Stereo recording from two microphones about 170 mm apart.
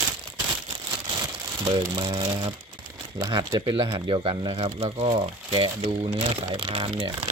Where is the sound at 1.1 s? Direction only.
25° right (ahead or behind).